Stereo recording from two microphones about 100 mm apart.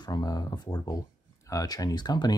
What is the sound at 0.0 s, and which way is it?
Speech, 40° left (ahead or behind).